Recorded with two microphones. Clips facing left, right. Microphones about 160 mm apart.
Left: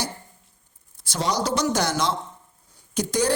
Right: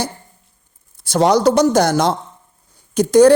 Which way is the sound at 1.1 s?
60° right (ahead or behind).